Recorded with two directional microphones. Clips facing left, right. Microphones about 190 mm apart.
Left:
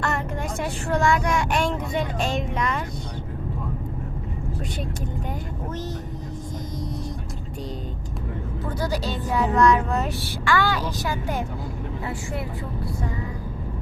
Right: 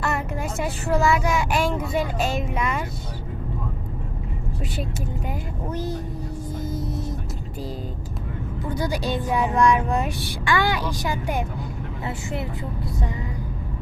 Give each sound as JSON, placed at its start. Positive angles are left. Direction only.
{"t": 0.0, "sound": "speech", "side_deg": -5}
{"t": 5.7, "sound": "speech", "side_deg": -10}
{"t": 6.7, "sound": "vehicle", "side_deg": -5}
{"t": 8.7, "sound": "speech", "side_deg": -15}